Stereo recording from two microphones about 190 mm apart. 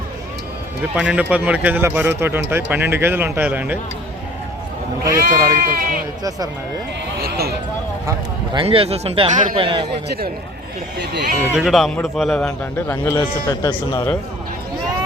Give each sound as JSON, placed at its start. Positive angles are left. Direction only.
{"t": 0.9, "sound": "speech", "side_deg": -5}
{"t": 5.1, "sound": "speech", "side_deg": -15}
{"t": 5.6, "sound": "speech", "side_deg": -45}
{"t": 7.2, "sound": "speech", "side_deg": -55}
{"t": 8.5, "sound": "a man's voice", "side_deg": -30}
{"t": 10.9, "sound": "speech", "side_deg": -60}
{"t": 11.5, "sound": "a man's voice", "side_deg": 0}
{"t": 13.6, "sound": "speech", "side_deg": 15}